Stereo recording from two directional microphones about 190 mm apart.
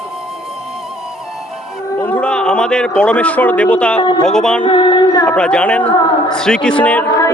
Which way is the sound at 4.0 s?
25° left (ahead or behind).